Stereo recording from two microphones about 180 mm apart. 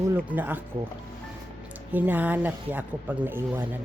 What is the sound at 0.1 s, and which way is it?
Speech, 10° right (ahead or behind).